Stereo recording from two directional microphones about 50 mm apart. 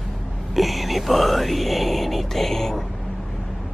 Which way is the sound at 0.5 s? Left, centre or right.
Centre.